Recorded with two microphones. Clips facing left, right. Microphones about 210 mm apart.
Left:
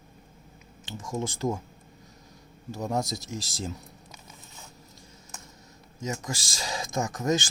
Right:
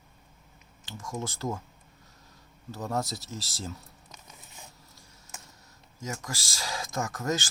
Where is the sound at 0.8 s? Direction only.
20° left (ahead or behind).